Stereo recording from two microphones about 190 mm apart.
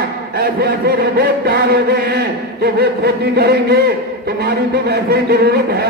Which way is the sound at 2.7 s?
60° right (ahead or behind).